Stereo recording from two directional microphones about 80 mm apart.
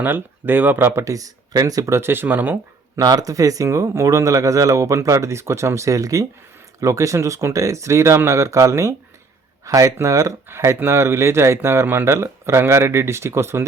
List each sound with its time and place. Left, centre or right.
0.0 s speech: right
1.0 s speech: right
2.0 s speech: right
2.9 s speech: right